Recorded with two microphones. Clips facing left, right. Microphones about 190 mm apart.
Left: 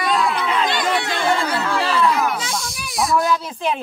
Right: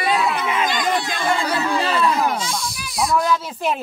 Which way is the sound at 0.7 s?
65° left (ahead or behind).